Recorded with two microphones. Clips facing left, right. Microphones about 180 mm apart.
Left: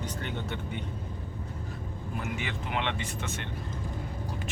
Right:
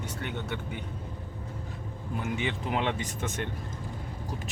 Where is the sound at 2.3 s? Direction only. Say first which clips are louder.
Right 5 dB; 35° right (ahead or behind).